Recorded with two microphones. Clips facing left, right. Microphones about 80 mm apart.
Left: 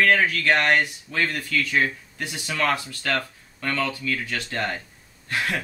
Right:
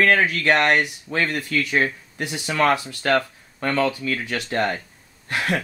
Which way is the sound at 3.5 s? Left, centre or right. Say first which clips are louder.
Right 5 dB; right.